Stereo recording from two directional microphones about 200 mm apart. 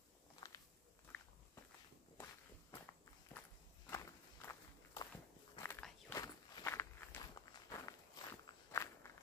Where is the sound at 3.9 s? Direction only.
15° left (ahead or behind).